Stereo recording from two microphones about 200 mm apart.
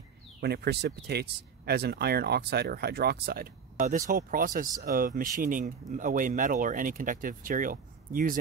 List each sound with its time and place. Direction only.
0.4 s speech: 55° right (ahead or behind)